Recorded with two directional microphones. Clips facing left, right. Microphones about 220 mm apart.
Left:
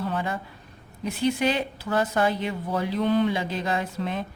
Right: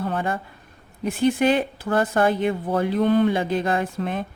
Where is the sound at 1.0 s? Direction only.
50° right (ahead or behind).